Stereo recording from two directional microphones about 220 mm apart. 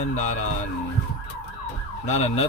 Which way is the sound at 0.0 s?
30° left (ahead or behind).